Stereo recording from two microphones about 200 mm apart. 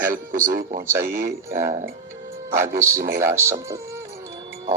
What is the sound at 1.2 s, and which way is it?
Speech, 15° right (ahead or behind).